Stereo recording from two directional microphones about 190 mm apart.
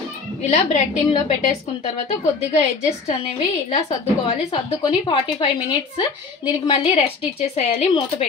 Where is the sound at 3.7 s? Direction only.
30° left (ahead or behind).